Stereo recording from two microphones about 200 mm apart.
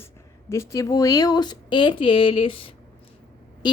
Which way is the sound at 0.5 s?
15° left (ahead or behind).